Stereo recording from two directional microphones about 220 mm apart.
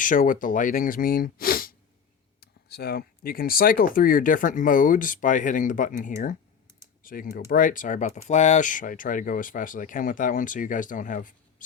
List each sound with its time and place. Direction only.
0.0 s speech: 35° left (ahead or behind)